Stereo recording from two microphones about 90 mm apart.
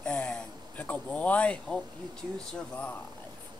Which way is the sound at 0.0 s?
10° left (ahead or behind).